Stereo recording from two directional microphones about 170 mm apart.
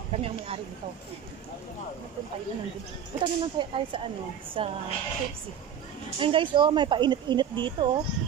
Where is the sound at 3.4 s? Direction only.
30° right (ahead or behind).